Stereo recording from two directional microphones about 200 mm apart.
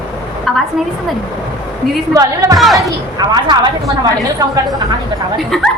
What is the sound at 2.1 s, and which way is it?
Speech, 15° right (ahead or behind).